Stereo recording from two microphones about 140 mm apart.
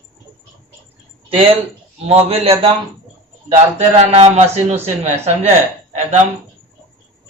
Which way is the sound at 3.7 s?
50° right (ahead or behind).